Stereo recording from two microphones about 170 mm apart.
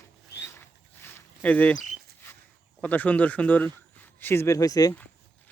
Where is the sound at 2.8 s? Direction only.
10° left (ahead or behind).